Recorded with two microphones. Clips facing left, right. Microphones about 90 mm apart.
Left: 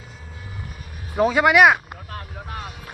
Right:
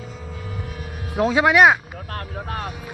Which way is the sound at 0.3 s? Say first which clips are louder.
Right 4 dB; 90° right.